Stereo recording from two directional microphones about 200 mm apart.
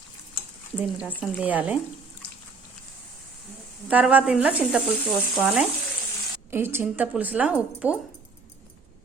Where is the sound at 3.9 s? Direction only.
5° right (ahead or behind).